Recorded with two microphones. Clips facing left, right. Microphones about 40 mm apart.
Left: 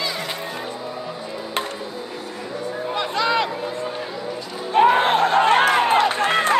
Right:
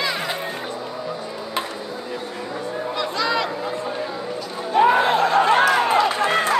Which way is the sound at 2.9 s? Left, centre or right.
Left.